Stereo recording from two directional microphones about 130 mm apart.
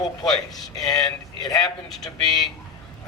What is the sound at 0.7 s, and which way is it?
Speech, 30° left (ahead or behind).